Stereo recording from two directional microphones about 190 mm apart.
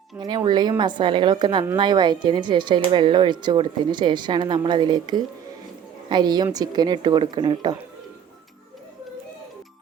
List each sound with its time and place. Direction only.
0.2 s speech: 25° right (ahead or behind)